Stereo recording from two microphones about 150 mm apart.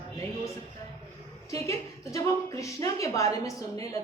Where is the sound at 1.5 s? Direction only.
20° left (ahead or behind).